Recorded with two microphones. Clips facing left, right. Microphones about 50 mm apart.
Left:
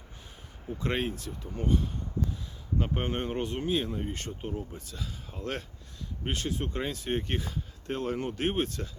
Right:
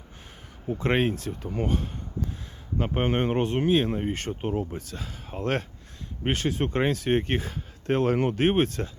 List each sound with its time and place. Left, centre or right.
0.8 s speech: right
1.1 s speech: right
1.5 s speech: right
2.7 s speech: right
7.1 s speech: right
8.3 s speech: right